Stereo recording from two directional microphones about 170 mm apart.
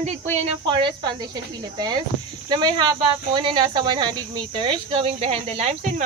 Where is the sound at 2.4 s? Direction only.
25° right (ahead or behind).